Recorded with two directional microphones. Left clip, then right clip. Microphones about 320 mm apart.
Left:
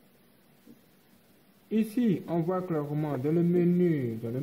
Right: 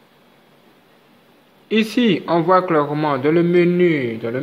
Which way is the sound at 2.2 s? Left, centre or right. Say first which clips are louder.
Right 16 dB; centre.